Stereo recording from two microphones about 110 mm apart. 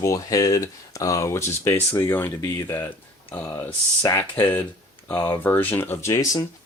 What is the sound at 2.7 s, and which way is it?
Speech, 15° left (ahead or behind).